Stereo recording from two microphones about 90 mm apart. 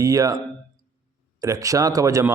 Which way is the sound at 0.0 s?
40° right (ahead or behind).